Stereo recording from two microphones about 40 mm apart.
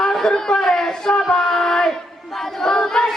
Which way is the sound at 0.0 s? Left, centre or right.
Centre.